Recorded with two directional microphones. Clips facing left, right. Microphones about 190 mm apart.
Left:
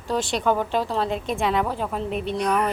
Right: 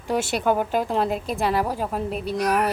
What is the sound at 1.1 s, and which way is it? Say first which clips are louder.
A woman's voice: even; 5° right (ahead or behind).